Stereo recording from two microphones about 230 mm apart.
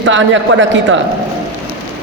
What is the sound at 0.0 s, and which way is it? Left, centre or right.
Speech, right.